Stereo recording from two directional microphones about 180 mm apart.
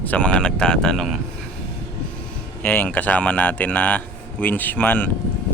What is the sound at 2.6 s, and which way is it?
Speech, 10° left (ahead or behind).